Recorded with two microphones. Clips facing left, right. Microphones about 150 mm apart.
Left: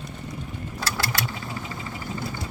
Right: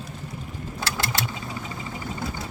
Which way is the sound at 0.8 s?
25° right (ahead or behind).